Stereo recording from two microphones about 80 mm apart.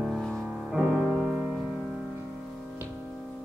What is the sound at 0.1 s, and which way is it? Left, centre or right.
Music, centre.